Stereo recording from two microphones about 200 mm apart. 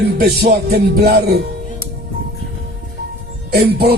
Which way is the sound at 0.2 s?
50° right (ahead or behind).